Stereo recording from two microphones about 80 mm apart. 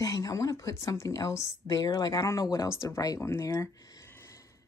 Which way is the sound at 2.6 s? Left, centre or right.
Left.